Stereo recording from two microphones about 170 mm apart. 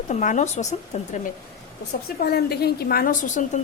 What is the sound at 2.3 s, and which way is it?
A woman's voice, 65° left (ahead or behind).